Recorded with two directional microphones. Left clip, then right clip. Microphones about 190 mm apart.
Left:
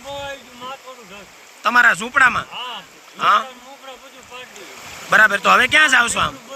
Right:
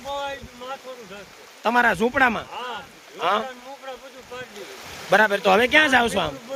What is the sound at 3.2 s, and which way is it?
Speech, 15° right (ahead or behind).